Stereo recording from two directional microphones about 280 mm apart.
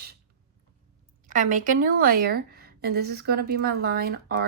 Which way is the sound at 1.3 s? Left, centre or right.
Right.